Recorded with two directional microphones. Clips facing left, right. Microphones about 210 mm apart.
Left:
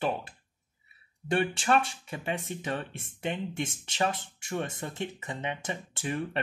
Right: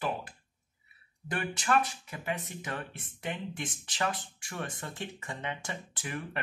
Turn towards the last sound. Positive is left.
turn(degrees=25)  # may be behind; listen again after turning